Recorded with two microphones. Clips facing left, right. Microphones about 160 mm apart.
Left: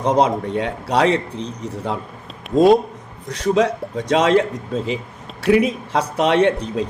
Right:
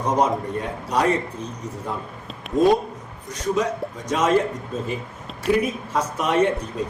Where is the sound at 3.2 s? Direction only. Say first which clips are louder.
Left 6 dB; 70° left (ahead or behind).